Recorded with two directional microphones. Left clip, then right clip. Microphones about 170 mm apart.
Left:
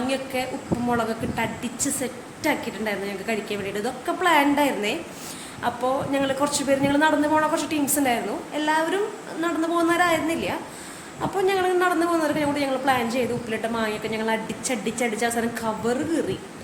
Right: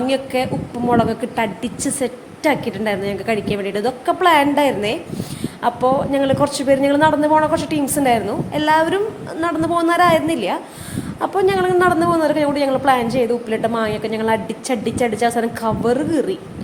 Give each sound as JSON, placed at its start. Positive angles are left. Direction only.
{"t": 0.3, "sound": "a man's voice", "side_deg": -45}